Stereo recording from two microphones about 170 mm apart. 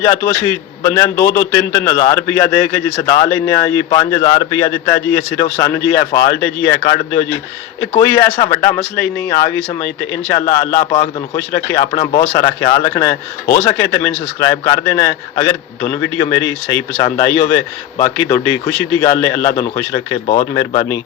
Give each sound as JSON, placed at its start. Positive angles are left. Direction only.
{"t": 0.0, "sound": "a man's voice", "side_deg": 15}
{"t": 20.2, "sound": "speech", "side_deg": 40}
{"t": 20.5, "sound": "a man's voice", "side_deg": 20}